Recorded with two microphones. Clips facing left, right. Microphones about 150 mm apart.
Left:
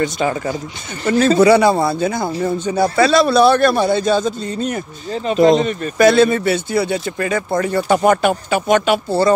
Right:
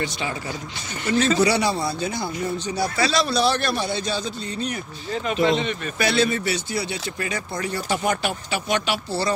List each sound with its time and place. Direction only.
0.0 s a man's voice: 45° left (ahead or behind)